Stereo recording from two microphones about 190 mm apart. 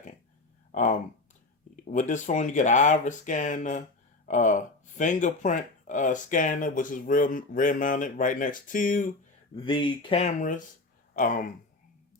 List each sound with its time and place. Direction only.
0.7 s a sound: 40° left (ahead or behind)
1.9 s speech: 40° left (ahead or behind)
9.6 s speech: 25° left (ahead or behind); by 11.4 s 45° left (ahead or behind)